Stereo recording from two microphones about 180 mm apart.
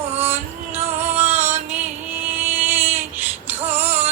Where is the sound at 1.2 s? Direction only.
10° right (ahead or behind).